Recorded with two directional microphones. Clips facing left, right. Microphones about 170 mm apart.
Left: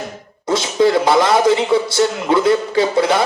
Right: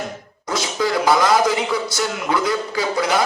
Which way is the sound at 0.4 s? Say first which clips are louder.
Left 7 dB; 25° left (ahead or behind).